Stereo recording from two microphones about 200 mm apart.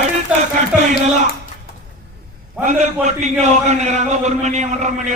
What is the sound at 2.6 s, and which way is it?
A man's voice, 35° right (ahead or behind).